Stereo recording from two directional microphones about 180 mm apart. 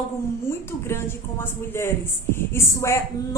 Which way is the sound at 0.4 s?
15° left (ahead or behind).